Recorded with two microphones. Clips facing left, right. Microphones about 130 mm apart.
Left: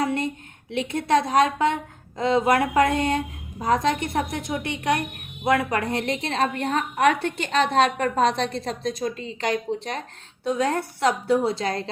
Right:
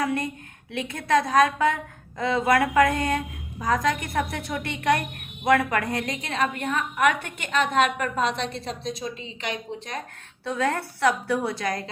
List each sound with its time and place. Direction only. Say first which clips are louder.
0.0 s a sound: left 2 dB; 25° left (ahead or behind)
0.7 s a woman's voice: left 2 dB; 25° left (ahead or behind)
10.4 s a woman's voice: left 2 dB; 20° left (ahead or behind)